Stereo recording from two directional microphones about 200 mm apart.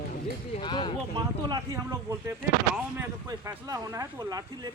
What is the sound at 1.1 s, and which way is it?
Speech, 20° right (ahead or behind).